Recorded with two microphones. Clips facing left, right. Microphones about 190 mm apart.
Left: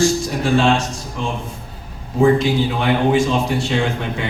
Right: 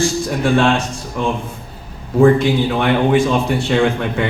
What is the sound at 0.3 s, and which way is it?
A man's voice, 55° right (ahead or behind).